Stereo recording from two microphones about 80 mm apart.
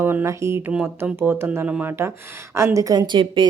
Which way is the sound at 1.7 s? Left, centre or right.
Centre.